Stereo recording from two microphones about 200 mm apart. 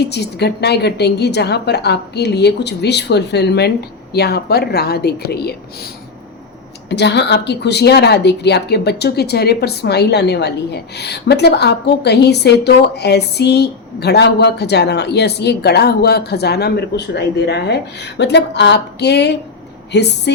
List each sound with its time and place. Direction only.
0.0 s a woman's voice: 55° left (ahead or behind)
6.9 s a woman's voice: 60° left (ahead or behind)